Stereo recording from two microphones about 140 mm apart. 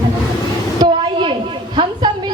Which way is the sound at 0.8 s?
35° right (ahead or behind).